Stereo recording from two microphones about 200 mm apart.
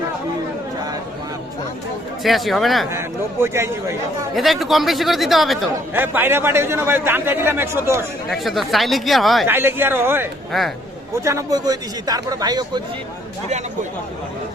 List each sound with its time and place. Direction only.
2.2 s speech: centre (ahead or behind)
3.4 s a man's voice: 15° right (ahead or behind)
4.4 s a man's voice: centre (ahead or behind)
8.3 s speech: centre (ahead or behind)
9.5 s a man's voice: 10° right (ahead or behind)
10.5 s speech: centre (ahead or behind)
11.2 s speech: 15° right (ahead or behind)